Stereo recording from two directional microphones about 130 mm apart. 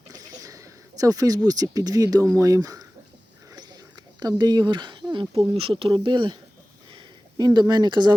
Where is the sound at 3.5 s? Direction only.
30° right (ahead or behind).